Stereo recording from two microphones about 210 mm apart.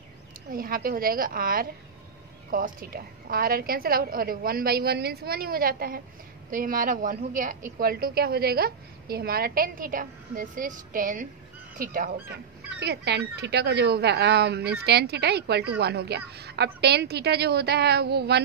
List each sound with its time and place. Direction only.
0.5 s a woman's voice: 45° right (ahead or behind)